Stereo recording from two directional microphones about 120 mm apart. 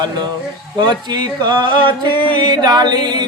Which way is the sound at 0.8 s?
35° right (ahead or behind).